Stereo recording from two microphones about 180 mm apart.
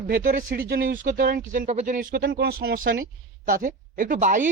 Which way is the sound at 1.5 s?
40° right (ahead or behind).